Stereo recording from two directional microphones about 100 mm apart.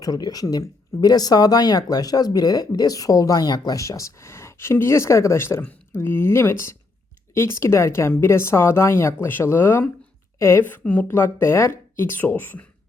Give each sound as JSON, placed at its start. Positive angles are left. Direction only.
{"t": 0.0, "sound": "speech", "side_deg": 40}